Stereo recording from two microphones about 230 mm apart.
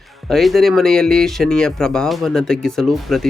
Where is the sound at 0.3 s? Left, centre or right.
Centre.